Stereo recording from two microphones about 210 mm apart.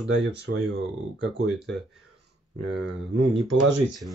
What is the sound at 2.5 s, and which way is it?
Speech, 55° right (ahead or behind).